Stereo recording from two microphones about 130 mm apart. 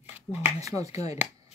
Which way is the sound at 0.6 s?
25° right (ahead or behind).